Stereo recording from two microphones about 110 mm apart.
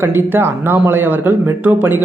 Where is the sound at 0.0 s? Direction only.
20° right (ahead or behind).